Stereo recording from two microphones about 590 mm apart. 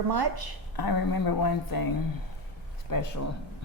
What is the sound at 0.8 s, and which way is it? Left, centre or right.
Speech, left.